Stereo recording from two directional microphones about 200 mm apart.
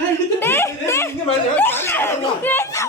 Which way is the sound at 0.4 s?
10° left (ahead or behind).